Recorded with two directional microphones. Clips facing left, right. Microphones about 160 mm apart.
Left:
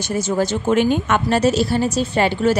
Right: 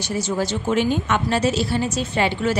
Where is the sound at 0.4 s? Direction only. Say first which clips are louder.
Left 5 dB; 50° left (ahead or behind).